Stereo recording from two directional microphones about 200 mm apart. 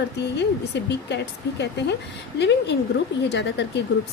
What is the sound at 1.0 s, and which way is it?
A woman's voice, 60° left (ahead or behind).